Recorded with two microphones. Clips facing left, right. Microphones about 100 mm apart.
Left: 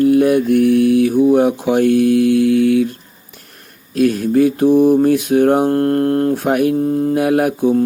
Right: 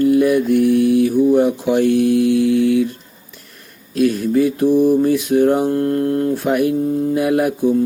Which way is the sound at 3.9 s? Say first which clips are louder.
Left 1 dB; 45° left (ahead or behind).